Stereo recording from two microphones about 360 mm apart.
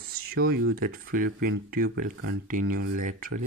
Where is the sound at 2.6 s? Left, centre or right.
Right.